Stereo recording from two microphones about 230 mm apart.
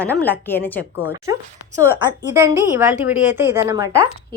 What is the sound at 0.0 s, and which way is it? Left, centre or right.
A woman's voice, centre.